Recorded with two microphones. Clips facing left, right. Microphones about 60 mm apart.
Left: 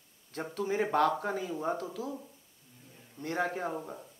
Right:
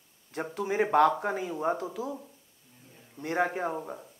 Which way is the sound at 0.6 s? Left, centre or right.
Right.